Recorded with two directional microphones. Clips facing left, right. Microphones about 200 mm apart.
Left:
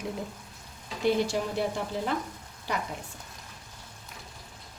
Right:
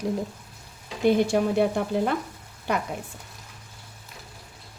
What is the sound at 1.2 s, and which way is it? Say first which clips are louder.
Speech: right 7 dB; 55° right (ahead or behind).